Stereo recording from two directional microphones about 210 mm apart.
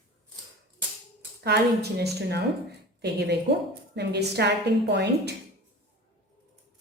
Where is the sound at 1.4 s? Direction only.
50° right (ahead or behind).